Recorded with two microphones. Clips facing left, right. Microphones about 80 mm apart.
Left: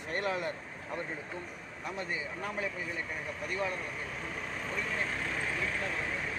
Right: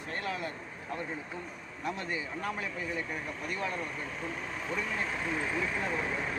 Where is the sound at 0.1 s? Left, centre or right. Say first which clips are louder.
Left 3 dB; left.